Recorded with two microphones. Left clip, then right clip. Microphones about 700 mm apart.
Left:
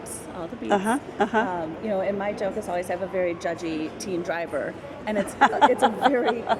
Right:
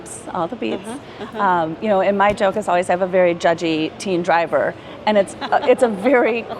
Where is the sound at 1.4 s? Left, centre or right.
Right.